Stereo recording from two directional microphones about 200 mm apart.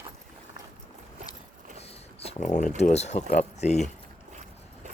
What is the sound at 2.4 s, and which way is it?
Speech, 35° left (ahead or behind).